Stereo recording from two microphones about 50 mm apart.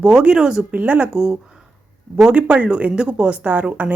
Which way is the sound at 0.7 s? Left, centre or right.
Right.